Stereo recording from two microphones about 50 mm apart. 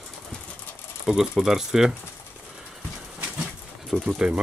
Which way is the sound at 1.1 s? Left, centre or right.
Centre.